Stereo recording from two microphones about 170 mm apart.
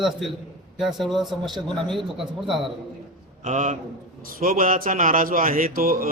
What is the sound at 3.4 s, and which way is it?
A man's voice, 50° right (ahead or behind).